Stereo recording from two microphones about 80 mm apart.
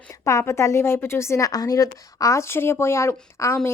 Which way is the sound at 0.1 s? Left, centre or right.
Left.